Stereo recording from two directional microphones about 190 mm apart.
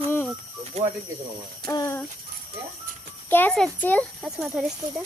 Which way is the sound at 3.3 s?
10° left (ahead or behind).